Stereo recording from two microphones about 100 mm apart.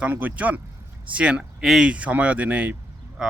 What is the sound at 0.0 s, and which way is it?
Speech, 15° right (ahead or behind).